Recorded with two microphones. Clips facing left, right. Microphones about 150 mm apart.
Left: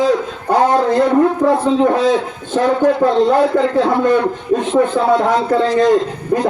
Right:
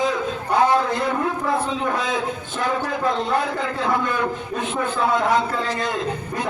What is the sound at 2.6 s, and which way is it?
A man's voice, 35° left (ahead or behind).